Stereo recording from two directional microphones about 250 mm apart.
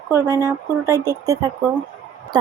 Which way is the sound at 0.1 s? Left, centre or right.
Centre.